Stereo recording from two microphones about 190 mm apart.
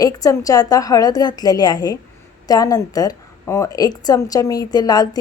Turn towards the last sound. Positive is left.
turn(degrees=20)  # may be behind; listen again after turning